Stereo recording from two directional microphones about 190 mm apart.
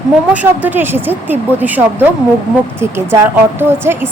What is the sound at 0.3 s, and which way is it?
A woman's voice, 10° right (ahead or behind).